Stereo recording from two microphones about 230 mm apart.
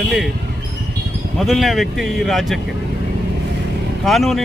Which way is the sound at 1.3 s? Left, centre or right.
Centre.